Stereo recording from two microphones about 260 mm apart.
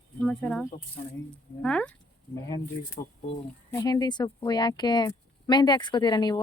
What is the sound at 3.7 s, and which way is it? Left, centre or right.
Speech, centre.